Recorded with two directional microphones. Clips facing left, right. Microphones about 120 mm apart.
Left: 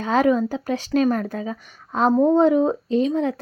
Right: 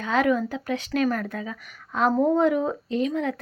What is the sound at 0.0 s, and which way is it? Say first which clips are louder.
Speech: left 4 dB; 35° left (ahead or behind).